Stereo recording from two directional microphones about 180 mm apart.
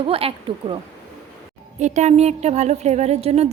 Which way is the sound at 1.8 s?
40° right (ahead or behind).